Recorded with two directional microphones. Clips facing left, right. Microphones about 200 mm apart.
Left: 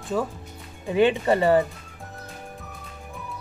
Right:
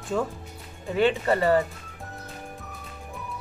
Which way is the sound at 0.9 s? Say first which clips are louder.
Left 3 dB; 15° left (ahead or behind).